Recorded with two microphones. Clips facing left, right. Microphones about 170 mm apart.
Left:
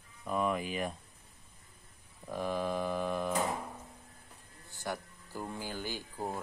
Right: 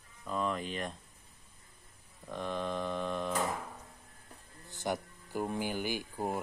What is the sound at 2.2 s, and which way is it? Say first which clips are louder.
Speech: left 2 dB; 5° left (ahead or behind).